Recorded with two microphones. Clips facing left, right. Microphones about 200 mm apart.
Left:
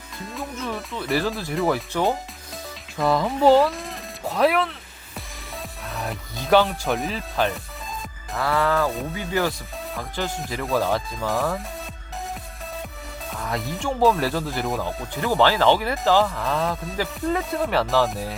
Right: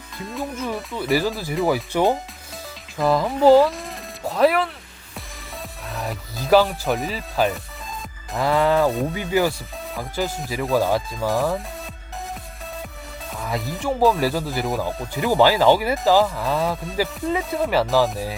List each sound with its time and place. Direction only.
0.3 s speech: centre (ahead or behind)
3.0 s speech: centre (ahead or behind)
5.9 s speech: centre (ahead or behind)
8.4 s speech: 20° right (ahead or behind); by 11.6 s centre (ahead or behind)
13.3 s speech: centre (ahead or behind)